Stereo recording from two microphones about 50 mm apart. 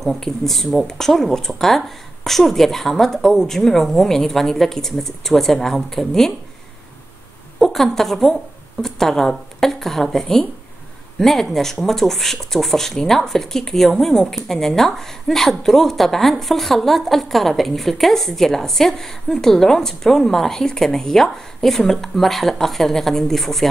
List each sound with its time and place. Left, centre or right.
0.0 s speech: centre
7.5 s a woman's voice: centre